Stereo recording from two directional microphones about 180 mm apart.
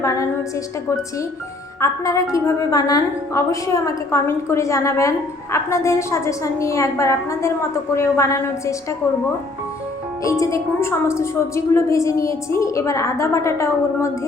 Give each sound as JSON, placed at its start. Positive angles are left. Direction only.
{"t": 0.0, "sound": "a woman's voice", "side_deg": 20}
{"t": 1.8, "sound": "a woman's voice", "side_deg": 15}
{"t": 10.2, "sound": "a woman's voice", "side_deg": 20}